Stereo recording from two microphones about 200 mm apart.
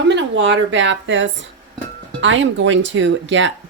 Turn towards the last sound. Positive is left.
turn(degrees=-65)  # may be behind; listen again after turning